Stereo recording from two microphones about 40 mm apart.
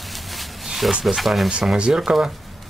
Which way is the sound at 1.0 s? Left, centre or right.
Centre.